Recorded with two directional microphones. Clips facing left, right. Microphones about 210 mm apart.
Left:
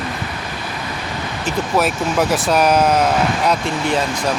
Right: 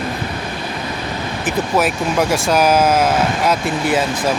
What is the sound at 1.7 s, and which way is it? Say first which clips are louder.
Speech: even; centre (ahead or behind).